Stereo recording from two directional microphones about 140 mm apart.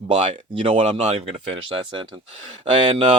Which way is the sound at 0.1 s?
55° right (ahead or behind).